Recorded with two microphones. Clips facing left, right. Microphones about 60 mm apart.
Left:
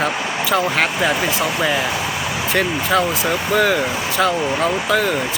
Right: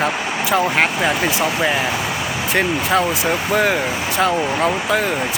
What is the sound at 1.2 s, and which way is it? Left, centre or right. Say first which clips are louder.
Speech: right 1 dB; centre.